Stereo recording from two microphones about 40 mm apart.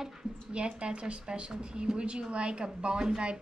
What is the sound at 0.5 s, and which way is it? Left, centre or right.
A woman's voice, right.